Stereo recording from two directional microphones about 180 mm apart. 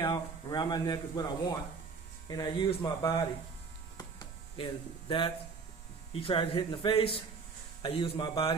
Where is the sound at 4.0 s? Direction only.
25° left (ahead or behind).